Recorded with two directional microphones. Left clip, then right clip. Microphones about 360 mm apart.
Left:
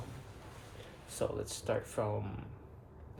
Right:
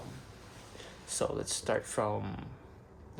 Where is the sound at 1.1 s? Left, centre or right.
Right.